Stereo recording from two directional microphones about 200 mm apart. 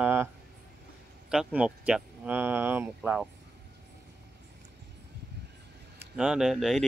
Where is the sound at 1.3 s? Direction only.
5° right (ahead or behind).